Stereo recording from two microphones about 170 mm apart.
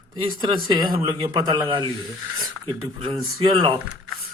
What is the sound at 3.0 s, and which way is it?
Speech, 35° right (ahead or behind).